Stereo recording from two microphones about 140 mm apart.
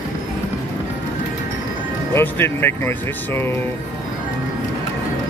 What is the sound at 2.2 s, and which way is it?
Speech, 15° left (ahead or behind).